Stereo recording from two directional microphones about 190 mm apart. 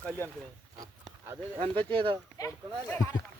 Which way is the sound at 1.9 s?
25° right (ahead or behind).